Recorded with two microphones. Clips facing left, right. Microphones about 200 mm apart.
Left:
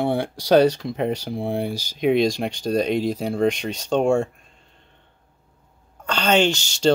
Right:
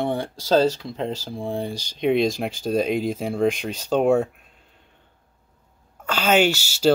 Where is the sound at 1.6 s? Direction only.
5° left (ahead or behind).